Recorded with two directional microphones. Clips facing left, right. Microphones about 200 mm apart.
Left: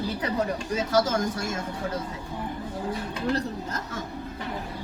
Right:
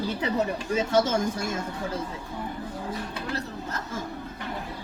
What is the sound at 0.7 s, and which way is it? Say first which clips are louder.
Speech: right 1 dB; 30° right (ahead or behind).